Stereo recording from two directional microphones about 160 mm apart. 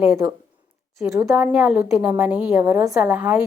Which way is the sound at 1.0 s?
20° right (ahead or behind).